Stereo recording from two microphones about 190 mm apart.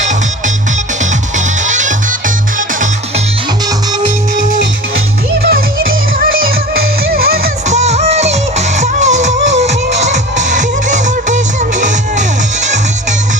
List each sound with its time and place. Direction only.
1.6 s music: 40° right (ahead or behind)
5.4 s music: 55° right (ahead or behind)
7.7 s music: 35° right (ahead or behind)